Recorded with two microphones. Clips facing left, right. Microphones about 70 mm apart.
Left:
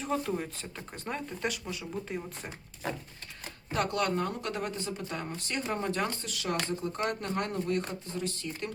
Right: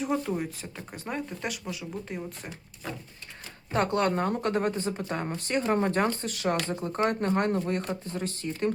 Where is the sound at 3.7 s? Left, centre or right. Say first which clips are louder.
Right 4 dB; right.